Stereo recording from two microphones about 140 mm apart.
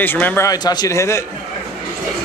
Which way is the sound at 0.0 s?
15° left (ahead or behind).